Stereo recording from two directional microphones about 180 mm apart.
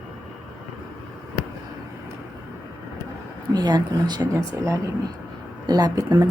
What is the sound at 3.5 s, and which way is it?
Speech, 25° right (ahead or behind).